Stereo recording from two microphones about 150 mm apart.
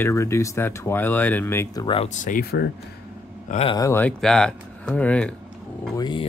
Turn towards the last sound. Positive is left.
turn(degrees=30)  # may be behind; listen again after turning